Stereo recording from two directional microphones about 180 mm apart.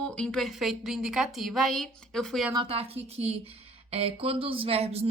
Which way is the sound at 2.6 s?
30° right (ahead or behind).